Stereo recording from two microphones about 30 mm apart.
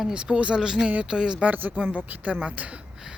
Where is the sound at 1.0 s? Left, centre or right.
Right.